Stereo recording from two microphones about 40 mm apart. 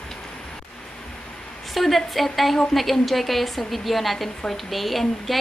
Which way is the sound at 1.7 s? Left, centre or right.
Centre.